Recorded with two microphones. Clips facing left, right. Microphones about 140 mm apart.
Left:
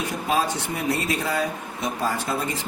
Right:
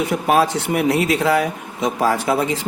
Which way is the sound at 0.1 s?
70° right (ahead or behind).